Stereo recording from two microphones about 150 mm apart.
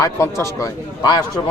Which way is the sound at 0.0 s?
20° left (ahead or behind).